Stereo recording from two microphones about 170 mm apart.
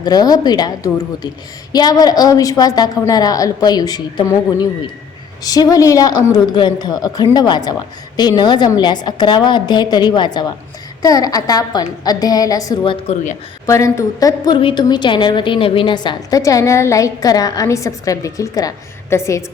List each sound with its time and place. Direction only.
0.0 s a woman's voice: 25° left (ahead or behind)
13.7 s a woman's voice: 15° left (ahead or behind)